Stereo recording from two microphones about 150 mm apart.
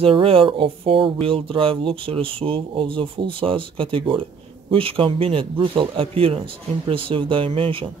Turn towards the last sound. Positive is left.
turn(degrees=-35)  # may be behind; listen again after turning